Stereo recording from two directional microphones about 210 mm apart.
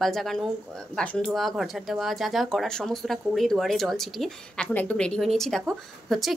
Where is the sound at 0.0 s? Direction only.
Centre (ahead or behind).